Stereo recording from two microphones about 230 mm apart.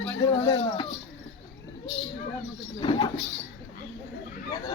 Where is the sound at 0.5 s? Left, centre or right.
Left.